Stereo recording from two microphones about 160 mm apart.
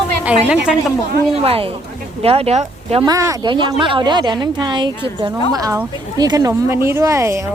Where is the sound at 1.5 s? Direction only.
35° right (ahead or behind).